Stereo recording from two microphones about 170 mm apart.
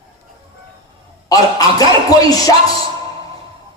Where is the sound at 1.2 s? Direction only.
20° left (ahead or behind).